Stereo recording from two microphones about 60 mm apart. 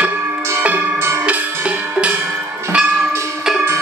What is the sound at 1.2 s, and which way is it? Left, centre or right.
Music, right.